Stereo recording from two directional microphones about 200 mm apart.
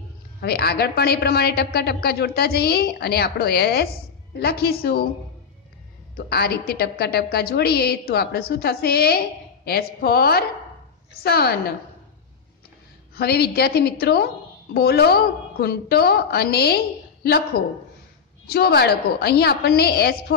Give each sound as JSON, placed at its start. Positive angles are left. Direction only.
{"t": 0.4, "sound": "a woman's voice", "side_deg": 50}
{"t": 6.1, "sound": "a woman's voice", "side_deg": 50}
{"t": 13.1, "sound": "a woman's voice", "side_deg": 50}
{"t": 18.5, "sound": "a woman's voice", "side_deg": 50}